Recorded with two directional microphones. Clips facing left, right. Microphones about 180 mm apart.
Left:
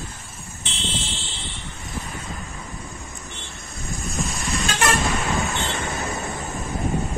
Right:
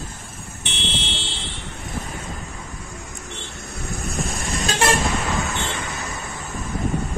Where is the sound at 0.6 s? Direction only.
70° right (ahead or behind).